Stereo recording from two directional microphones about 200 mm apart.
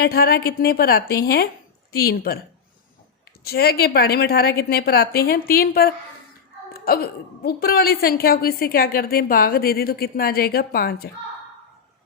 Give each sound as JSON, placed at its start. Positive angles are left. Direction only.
{"t": 0.0, "sound": "a woman's voice", "side_deg": 50}
{"t": 3.4, "sound": "a woman's voice", "side_deg": 50}